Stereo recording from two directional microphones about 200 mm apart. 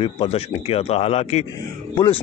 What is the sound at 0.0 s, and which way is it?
A man's voice, 25° left (ahead or behind).